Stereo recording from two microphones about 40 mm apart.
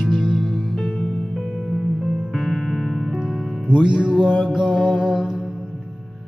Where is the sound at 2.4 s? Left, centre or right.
Centre.